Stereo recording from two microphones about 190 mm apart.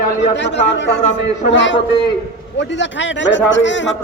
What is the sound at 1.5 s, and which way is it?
A man's voice, 75° left (ahead or behind).